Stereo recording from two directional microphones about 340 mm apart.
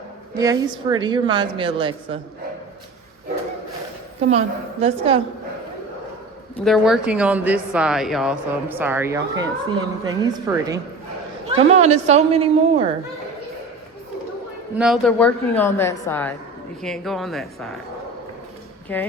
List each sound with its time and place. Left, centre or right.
0.3 s a woman's voice: centre
4.3 s a woman's voice: centre
6.7 s a woman's voice: centre
14.8 s a woman's voice: centre
18.9 s a woman's voice: centre